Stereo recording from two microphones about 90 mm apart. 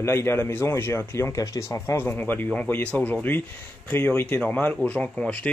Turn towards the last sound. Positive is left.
turn(degrees=10)  # may be behind; listen again after turning